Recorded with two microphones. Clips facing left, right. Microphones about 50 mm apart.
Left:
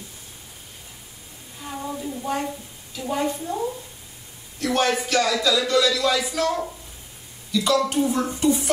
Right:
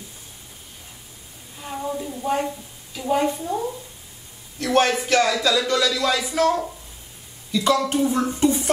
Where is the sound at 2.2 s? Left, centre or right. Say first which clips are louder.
Right 4 dB; centre.